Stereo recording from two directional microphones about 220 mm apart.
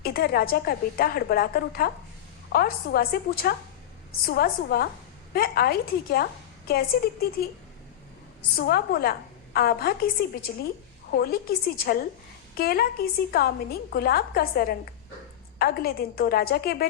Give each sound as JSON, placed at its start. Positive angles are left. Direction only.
{"t": 0.0, "sound": "a woman's voice", "side_deg": 45}
{"t": 8.5, "sound": "a woman's voice", "side_deg": 45}